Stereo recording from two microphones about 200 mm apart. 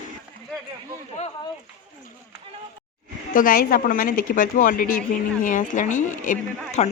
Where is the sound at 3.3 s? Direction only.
45° left (ahead or behind).